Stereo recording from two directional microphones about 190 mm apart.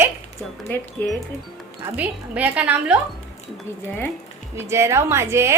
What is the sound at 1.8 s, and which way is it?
A woman's voice, 10° right (ahead or behind).